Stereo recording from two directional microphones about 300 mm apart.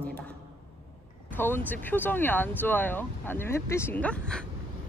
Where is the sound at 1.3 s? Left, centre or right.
Centre.